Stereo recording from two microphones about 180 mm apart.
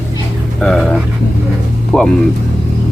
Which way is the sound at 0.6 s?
5° left (ahead or behind).